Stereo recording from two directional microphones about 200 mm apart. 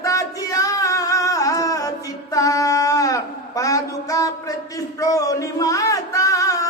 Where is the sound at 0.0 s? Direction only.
15° left (ahead or behind).